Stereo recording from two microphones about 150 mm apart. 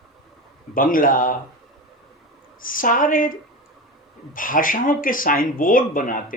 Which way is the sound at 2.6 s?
65° left (ahead or behind).